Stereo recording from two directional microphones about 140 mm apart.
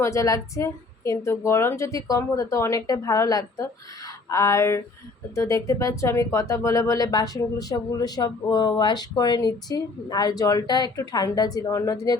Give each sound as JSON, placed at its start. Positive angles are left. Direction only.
{"t": 0.0, "sound": "speech", "side_deg": 20}